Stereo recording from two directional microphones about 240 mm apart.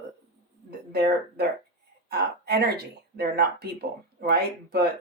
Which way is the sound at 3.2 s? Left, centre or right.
Right.